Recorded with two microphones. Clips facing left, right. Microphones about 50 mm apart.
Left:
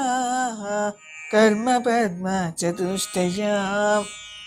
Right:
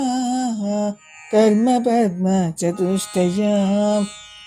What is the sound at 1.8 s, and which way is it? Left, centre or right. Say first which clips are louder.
Speech: right 3 dB; left.